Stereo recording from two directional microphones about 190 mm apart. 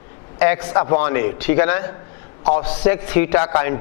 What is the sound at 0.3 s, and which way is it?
A man's voice, 15° left (ahead or behind).